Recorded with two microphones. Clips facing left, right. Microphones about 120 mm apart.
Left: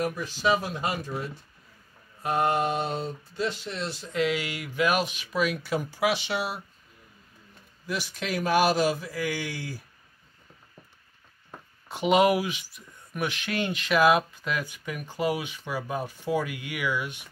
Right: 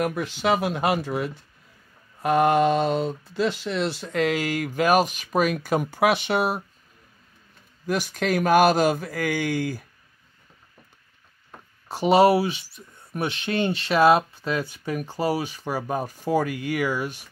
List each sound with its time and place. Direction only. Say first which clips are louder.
0.0 s speech: right 3 dB; 65° right (ahead or behind)
4.1 s speech: right 2 dB; 45° right (ahead or behind)
7.8 s speech: right 7 dB; 50° right (ahead or behind)
11.9 s speech: right 4 dB; 35° right (ahead or behind)